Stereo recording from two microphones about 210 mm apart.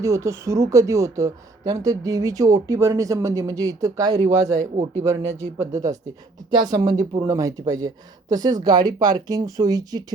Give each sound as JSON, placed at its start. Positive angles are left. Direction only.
{"t": 0.0, "sound": "speech", "side_deg": -15}